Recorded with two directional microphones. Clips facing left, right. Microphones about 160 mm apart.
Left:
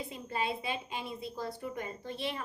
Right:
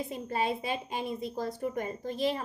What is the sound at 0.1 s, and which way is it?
A woman's voice, 40° right (ahead or behind).